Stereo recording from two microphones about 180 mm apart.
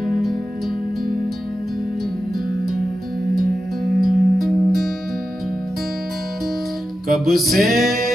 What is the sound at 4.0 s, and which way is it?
Music, centre (ahead or behind).